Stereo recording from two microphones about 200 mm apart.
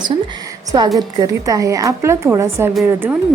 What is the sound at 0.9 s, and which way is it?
A woman's voice, 20° right (ahead or behind).